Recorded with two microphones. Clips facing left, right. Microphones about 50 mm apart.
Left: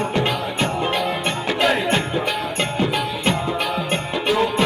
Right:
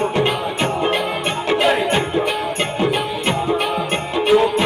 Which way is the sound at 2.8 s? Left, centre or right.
Right.